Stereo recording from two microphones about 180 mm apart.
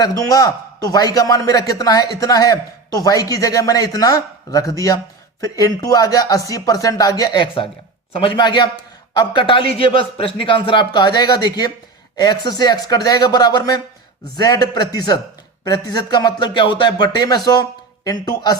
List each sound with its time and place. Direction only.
0.0 s speech: 20° left (ahead or behind)